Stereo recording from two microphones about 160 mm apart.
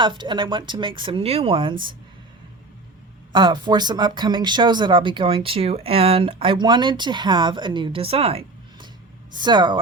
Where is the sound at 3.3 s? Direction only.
30° right (ahead or behind).